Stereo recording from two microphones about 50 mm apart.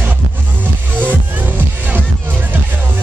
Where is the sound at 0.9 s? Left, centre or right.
Right.